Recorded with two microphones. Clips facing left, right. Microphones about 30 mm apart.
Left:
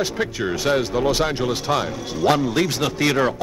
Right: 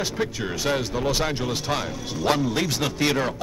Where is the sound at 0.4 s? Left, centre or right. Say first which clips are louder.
Left 7 dB; centre.